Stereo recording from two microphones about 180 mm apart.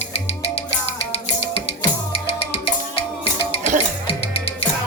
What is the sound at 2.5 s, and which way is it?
Music, 30° left (ahead or behind).